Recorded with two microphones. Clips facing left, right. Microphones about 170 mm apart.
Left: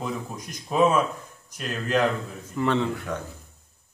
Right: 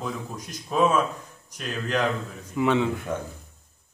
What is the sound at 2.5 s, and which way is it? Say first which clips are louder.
Mantra: right 2 dB; 5° right (ahead or behind).